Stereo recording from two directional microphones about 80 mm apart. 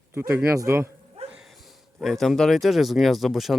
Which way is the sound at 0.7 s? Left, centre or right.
Right.